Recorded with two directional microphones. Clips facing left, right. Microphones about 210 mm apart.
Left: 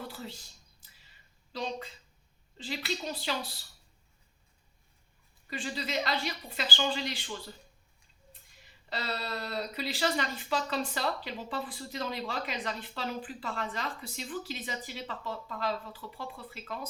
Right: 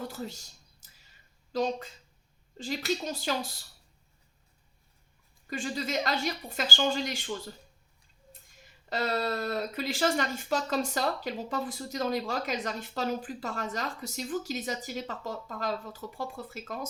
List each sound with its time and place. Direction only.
0.1 s speech: 45° right (ahead or behind)
1.5 s speech: 45° right (ahead or behind)
5.5 s speech: 45° right (ahead or behind)
8.9 s speech: 50° right (ahead or behind)